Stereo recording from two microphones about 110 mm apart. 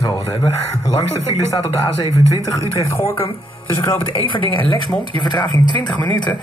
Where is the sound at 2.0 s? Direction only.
45° left (ahead or behind).